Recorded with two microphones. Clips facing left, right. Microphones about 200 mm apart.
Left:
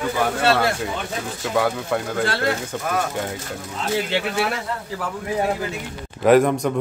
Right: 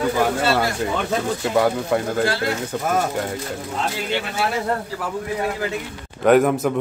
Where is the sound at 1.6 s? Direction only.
15° right (ahead or behind).